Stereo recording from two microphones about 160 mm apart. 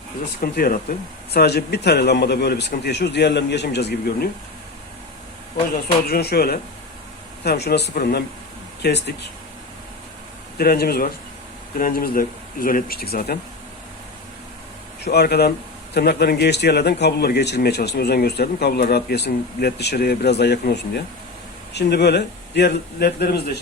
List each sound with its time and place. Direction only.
0.4 s a man's voice: 70° left (ahead or behind)
5.7 s speech: 75° left (ahead or behind)
7.4 s a man's voice: 90° left
10.6 s speech: 75° left (ahead or behind)
15.0 s a man's voice: 90° left